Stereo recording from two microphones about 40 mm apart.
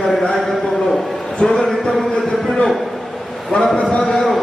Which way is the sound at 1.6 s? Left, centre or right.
Centre.